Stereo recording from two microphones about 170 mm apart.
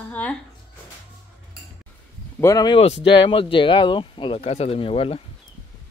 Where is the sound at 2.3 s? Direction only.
20° left (ahead or behind).